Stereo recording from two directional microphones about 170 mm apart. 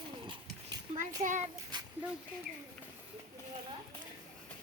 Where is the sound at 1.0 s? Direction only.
45° right (ahead or behind).